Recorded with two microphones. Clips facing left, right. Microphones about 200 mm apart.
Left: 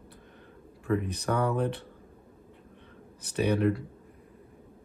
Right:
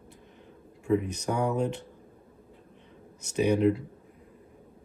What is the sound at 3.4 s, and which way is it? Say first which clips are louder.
Speech: right 2 dB; 10° right (ahead or behind).